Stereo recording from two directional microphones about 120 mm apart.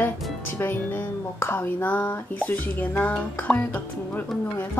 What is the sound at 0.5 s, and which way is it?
Speech, 20° left (ahead or behind).